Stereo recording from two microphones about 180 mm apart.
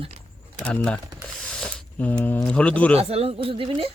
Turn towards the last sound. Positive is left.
turn(degrees=-30)  # may be behind; listen again after turning